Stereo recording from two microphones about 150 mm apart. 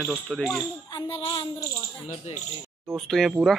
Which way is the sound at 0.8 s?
30° left (ahead or behind).